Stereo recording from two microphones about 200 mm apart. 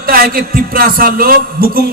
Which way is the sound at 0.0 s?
45° right (ahead or behind).